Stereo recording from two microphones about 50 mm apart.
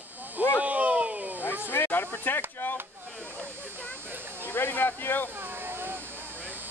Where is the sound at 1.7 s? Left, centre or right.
Left.